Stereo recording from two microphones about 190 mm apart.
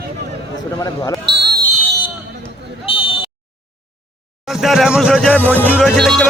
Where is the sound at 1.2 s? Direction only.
60° right (ahead or behind).